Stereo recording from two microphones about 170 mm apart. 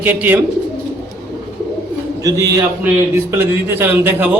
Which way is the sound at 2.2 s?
20° right (ahead or behind).